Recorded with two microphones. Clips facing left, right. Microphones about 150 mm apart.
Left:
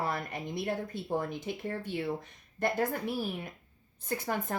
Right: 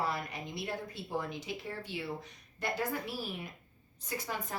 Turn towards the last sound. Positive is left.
turn(degrees=55)  # may be behind; listen again after turning